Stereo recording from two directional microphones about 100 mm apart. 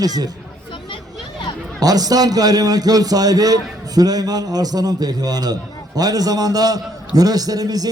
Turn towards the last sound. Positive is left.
turn(degrees=-40)  # may be behind; listen again after turning